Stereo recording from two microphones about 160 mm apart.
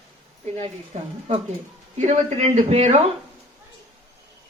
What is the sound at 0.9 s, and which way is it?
A man's voice, 45° right (ahead or behind).